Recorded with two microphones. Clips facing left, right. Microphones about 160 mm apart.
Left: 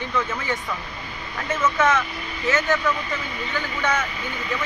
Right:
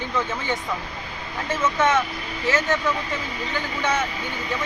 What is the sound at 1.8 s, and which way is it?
Speech, 30° right (ahead or behind).